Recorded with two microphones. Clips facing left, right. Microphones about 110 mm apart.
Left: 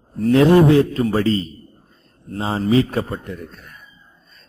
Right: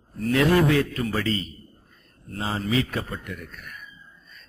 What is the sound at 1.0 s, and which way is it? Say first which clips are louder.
A man's voice: left 8 dB; 40° left (ahead or behind).